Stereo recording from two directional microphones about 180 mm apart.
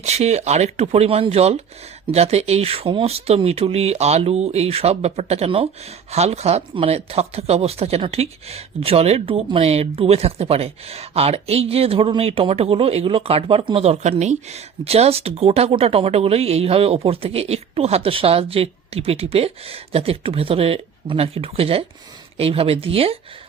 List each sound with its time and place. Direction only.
0.0 s speech: 35° right (ahead or behind)